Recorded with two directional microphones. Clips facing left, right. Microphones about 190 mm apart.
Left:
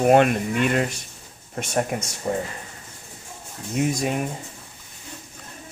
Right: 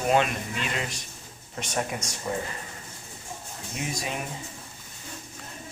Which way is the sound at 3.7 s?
50° left (ahead or behind).